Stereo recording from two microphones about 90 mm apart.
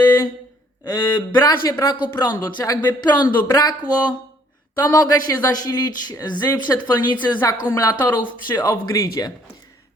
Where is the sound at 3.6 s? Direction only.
50° left (ahead or behind).